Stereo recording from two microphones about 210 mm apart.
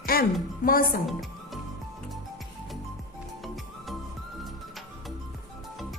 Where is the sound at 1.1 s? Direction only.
Centre (ahead or behind).